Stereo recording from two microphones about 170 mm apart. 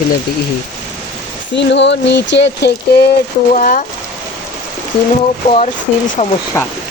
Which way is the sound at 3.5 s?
50° left (ahead or behind).